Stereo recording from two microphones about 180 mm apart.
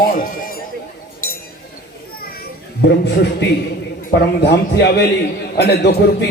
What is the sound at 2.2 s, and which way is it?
Children playing, 55° left (ahead or behind).